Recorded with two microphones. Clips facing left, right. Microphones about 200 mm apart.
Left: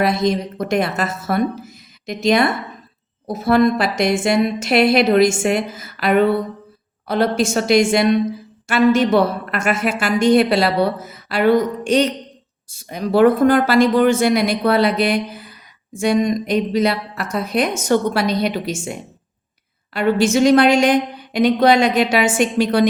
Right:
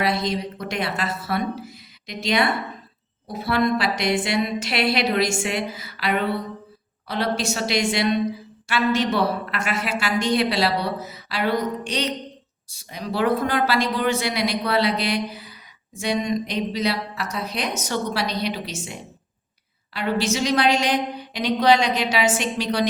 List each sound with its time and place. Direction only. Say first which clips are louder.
0.0 s speech: left 6 dB; 45° left (ahead or behind)